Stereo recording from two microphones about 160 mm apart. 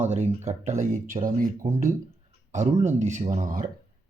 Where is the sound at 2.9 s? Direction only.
45° right (ahead or behind).